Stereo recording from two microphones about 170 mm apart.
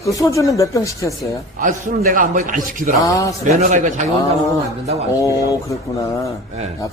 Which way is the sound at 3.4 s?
45° right (ahead or behind).